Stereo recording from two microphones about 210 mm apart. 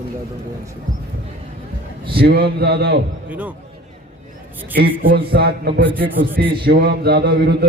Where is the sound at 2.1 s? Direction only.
50° right (ahead or behind).